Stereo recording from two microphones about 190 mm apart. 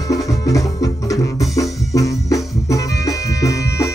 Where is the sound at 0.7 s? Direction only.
20° left (ahead or behind).